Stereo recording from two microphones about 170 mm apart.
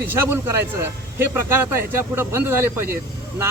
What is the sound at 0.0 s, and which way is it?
Speech, 15° right (ahead or behind).